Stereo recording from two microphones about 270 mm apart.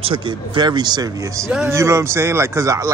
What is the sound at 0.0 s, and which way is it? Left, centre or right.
Speech, centre.